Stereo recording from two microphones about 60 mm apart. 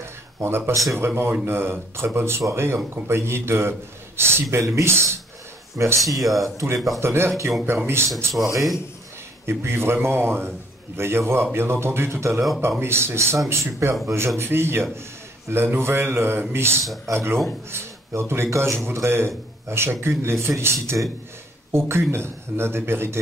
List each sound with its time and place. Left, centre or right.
0.4 s a man's voice: right
5.8 s a man's voice: right
9.5 s a man's voice: right
16.8 s speech: centre
17.1 s a man's voice: right